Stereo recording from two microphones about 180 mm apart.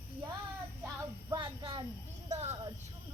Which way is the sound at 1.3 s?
25° right (ahead or behind).